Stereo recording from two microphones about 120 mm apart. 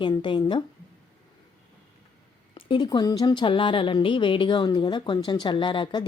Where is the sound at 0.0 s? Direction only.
40° left (ahead or behind).